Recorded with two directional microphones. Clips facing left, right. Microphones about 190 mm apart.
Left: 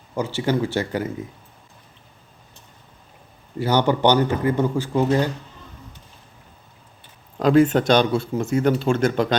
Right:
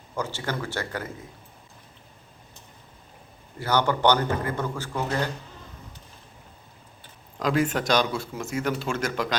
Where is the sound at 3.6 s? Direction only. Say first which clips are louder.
Left 4 dB; 15° left (ahead or behind).